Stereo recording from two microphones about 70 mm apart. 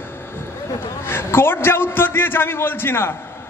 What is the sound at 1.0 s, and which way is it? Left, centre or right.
A man's voice, left.